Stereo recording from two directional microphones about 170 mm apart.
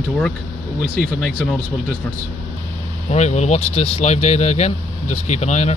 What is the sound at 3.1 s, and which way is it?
Speech, 40° left (ahead or behind).